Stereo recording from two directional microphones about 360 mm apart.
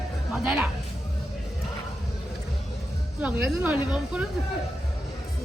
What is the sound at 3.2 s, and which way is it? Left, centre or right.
Speech, centre.